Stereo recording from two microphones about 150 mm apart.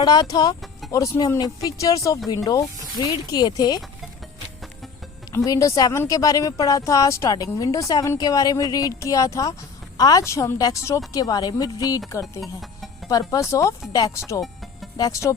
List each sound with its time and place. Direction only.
0.0 s speech: 30° left (ahead or behind)
5.5 s speech: 25° left (ahead or behind)